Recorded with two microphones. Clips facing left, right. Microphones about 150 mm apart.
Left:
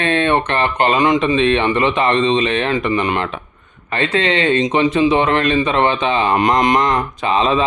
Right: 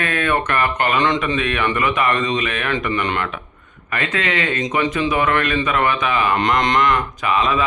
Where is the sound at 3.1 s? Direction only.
30° left (ahead or behind).